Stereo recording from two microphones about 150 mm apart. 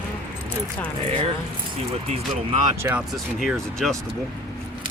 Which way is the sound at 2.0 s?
40° right (ahead or behind).